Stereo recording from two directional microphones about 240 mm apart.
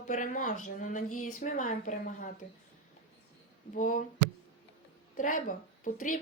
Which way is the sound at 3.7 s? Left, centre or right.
Left.